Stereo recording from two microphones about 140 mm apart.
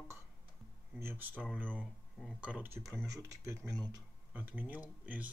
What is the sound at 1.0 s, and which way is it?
Speech, 15° right (ahead or behind).